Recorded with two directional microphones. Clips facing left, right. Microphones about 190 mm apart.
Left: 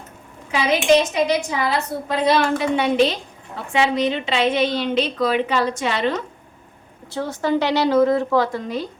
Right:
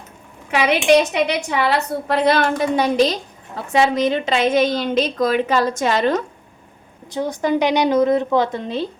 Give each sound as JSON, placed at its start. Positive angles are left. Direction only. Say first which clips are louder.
{"t": 0.5, "sound": "a woman's voice", "louder": "right 2 dB", "side_deg": -65}
{"t": 2.7, "sound": "a woman's voice", "louder": "right 1 dB", "side_deg": -40}
{"t": 7.1, "sound": "a woman's voice", "louder": "right 2 dB", "side_deg": -15}